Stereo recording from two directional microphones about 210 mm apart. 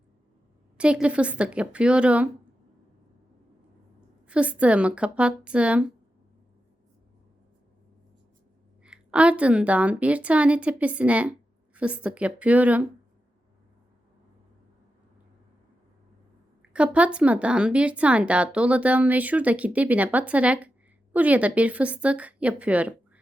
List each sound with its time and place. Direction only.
0.8 s speech: 5° right (ahead or behind)
4.3 s speech: 5° right (ahead or behind)
8.8 s speech: 5° right (ahead or behind)
16.7 s speech: 5° right (ahead or behind)